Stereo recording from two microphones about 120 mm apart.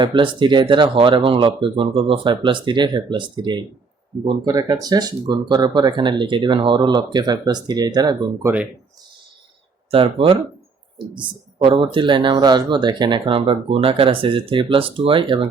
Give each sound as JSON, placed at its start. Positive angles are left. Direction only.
{"t": 0.0, "sound": "speech", "side_deg": -40}
{"t": 9.9, "sound": "speech", "side_deg": -50}